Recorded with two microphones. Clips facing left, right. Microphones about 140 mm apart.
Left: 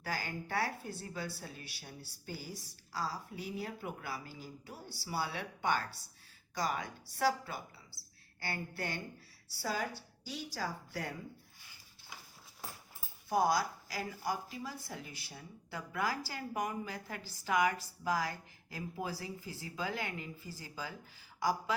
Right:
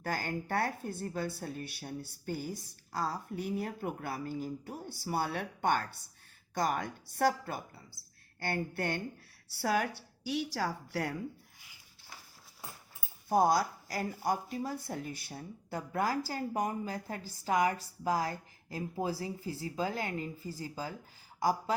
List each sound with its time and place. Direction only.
0.0 s a woman's voice: 50° right (ahead or behind); by 11.1 s 70° right (ahead or behind)
13.4 s a woman's voice: 50° right (ahead or behind)